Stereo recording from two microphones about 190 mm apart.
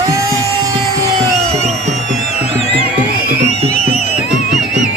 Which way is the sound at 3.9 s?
35° left (ahead or behind).